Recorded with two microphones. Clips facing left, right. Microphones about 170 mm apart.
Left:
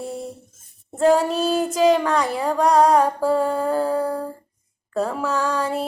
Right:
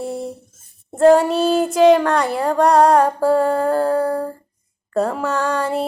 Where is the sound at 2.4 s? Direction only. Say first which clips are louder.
Right 3 dB; 60° right (ahead or behind).